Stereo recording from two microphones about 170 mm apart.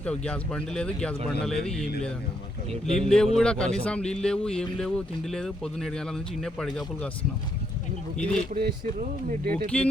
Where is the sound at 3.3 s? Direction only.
5° left (ahead or behind).